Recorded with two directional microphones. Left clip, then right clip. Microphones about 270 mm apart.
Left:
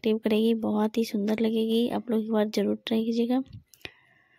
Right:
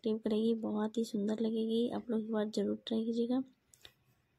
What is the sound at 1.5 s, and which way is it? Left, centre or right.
Speech, left.